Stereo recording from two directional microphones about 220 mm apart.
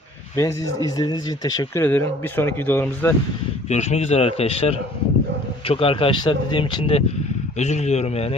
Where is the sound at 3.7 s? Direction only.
30° left (ahead or behind).